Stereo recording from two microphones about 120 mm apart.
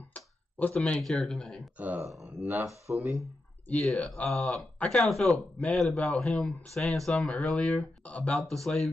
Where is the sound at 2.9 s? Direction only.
15° right (ahead or behind).